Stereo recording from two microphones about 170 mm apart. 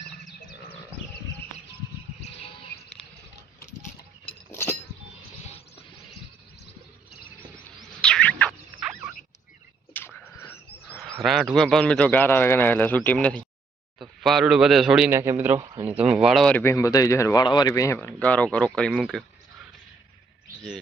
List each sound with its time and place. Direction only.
2.3 s insect: 35° left (ahead or behind)
4.5 s chink: 15° left (ahead or behind)
5.4 s music: 40° left (ahead or behind)
7.8 s bird: 5° left (ahead or behind)
8.8 s a sound: 5° right (ahead or behind)
9.9 s bird: 10° left (ahead or behind)
11.0 s a man's voice: centre (ahead or behind)
15.1 s a man's voice: 15° right (ahead or behind); by 19.2 s centre (ahead or behind)